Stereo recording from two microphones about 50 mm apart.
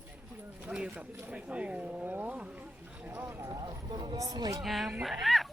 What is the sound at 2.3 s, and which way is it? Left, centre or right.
Run, right.